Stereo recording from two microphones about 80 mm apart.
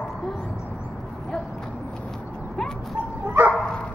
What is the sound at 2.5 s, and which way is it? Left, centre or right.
Dog, centre.